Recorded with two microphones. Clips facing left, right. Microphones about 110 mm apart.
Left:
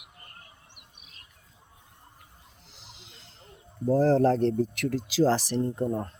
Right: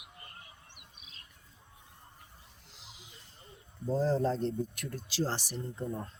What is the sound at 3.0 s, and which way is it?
Speech, 80° left.